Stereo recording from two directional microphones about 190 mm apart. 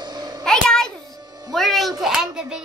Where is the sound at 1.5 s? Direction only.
Centre (ahead or behind).